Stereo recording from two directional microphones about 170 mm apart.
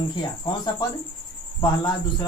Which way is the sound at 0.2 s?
25° left (ahead or behind).